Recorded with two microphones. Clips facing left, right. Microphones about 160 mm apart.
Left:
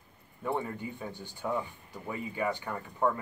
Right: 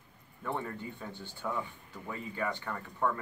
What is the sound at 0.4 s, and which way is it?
Speech, 15° left (ahead or behind).